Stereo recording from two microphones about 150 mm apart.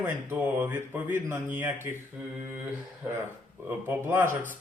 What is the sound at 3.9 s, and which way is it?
Speech, 15° right (ahead or behind).